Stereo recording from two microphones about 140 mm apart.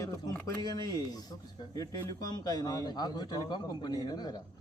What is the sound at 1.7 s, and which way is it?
Speech, 25° left (ahead or behind).